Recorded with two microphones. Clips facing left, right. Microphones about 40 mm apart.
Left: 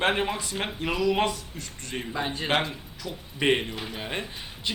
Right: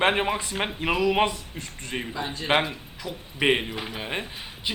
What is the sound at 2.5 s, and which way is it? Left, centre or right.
Speech, centre.